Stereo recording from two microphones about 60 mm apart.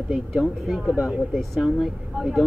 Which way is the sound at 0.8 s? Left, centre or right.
Right.